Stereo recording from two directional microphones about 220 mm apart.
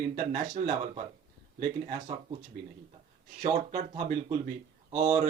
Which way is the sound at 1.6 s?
35° right (ahead or behind).